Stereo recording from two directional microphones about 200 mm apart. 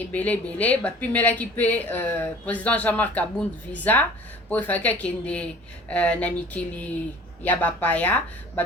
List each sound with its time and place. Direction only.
0.1 s speech: 5° left (ahead or behind)